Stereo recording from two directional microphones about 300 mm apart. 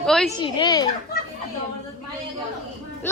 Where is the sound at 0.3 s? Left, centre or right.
Centre.